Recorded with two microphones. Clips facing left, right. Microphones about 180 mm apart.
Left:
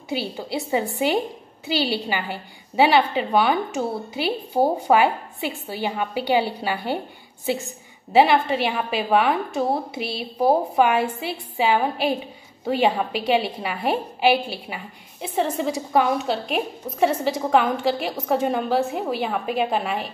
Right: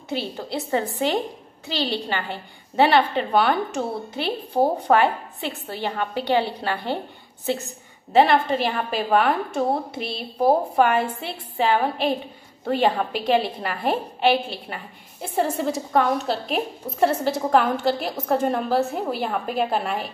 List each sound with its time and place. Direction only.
0.1 s a woman's voice: 5° left (ahead or behind)